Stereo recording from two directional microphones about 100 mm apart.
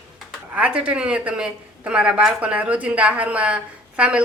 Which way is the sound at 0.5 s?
10° right (ahead or behind).